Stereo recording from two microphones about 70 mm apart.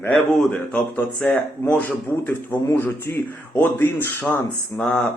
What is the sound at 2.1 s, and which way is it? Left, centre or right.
Speech, left.